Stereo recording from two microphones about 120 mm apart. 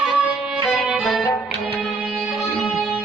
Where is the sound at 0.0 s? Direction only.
5° right (ahead or behind).